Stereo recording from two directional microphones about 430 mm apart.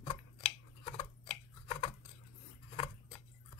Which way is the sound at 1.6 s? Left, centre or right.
Centre.